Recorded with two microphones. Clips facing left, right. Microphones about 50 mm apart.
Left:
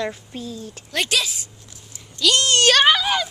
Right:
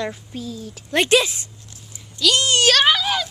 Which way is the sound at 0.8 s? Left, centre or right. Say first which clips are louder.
Right 6 dB; right.